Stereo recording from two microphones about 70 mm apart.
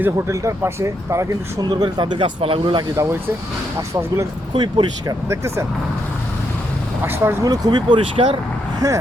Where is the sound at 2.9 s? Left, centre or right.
Right.